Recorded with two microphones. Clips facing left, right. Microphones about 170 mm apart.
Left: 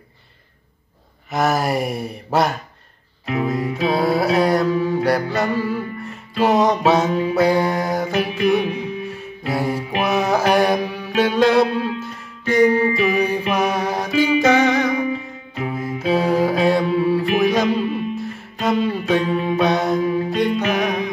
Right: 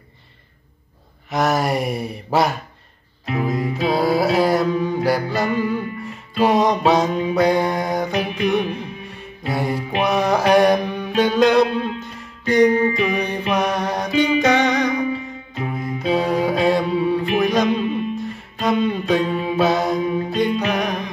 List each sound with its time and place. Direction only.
1.3 s music: centre (ahead or behind)
3.4 s mantra: centre (ahead or behind)
5.6 s music: 5° left (ahead or behind)
15.7 s mantra: 5° left (ahead or behind)
17.4 s music: centre (ahead or behind)